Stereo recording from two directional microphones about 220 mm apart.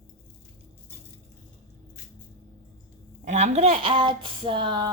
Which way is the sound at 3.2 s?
30° right (ahead or behind).